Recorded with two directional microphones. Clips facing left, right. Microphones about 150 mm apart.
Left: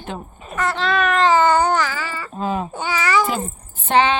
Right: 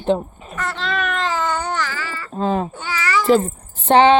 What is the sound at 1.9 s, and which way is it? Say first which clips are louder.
Baby cry: left 1 dB; 15° left (ahead or behind).